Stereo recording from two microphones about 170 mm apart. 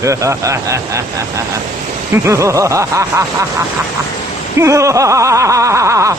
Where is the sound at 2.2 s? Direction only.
15° right (ahead or behind).